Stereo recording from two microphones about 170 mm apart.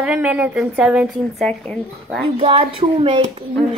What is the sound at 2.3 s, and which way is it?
Speech, 30° right (ahead or behind).